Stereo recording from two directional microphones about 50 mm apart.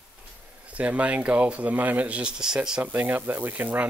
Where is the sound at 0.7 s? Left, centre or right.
Right.